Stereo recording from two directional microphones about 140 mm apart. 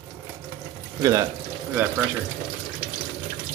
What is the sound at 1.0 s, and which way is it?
Speech, 25° right (ahead or behind).